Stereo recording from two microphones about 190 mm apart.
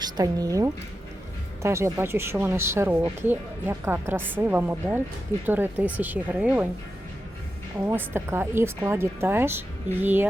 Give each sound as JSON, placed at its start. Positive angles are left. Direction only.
{"t": 0.0, "sound": "speech", "side_deg": -20}
{"t": 7.9, "sound": "speech", "side_deg": -15}